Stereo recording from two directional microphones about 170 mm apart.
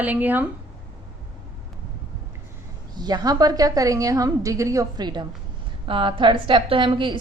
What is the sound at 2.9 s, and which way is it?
A woman's voice, 25° right (ahead or behind).